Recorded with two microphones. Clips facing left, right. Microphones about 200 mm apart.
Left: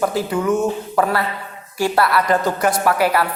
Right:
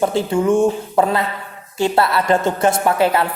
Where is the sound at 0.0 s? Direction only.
25° right (ahead or behind).